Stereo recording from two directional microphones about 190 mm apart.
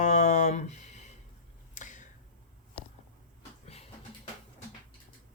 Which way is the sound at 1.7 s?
40° left (ahead or behind).